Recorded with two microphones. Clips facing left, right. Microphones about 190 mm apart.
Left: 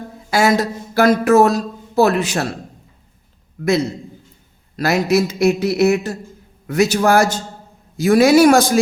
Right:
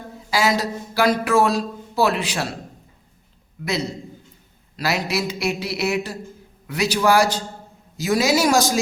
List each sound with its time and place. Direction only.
0.3 s speech: 55° left (ahead or behind)
4.8 s speech: 50° left (ahead or behind)